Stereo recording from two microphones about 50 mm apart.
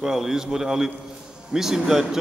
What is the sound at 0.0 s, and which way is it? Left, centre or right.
Speech, centre.